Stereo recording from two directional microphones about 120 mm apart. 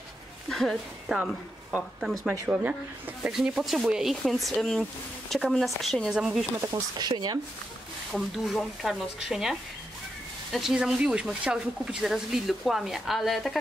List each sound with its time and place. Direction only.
0.5 s speech: 5° left (ahead or behind)
7.0 s speech: 35° right (ahead or behind)
8.1 s speech: centre (ahead or behind)